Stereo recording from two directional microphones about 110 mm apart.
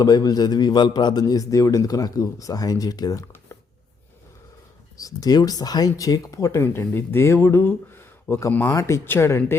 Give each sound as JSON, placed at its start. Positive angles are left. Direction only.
{"t": 0.0, "sound": "a man's voice", "side_deg": 35}
{"t": 4.9, "sound": "a man's voice", "side_deg": 35}